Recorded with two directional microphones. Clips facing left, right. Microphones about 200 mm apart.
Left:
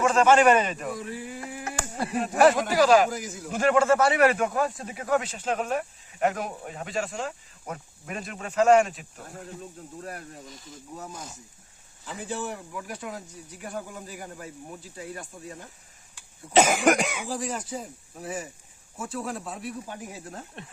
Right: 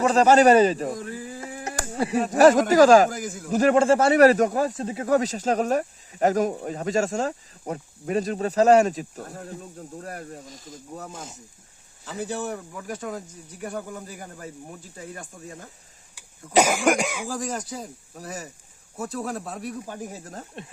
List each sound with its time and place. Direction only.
0.0 s speech: 35° right (ahead or behind)
2.2 s speech: 40° right (ahead or behind)
12.2 s speech: 40° right (ahead or behind)
16.6 s cough: centre (ahead or behind)
17.2 s speech: 45° right (ahead or behind)